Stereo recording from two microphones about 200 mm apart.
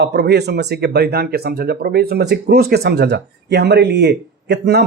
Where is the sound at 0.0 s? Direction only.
55° right (ahead or behind).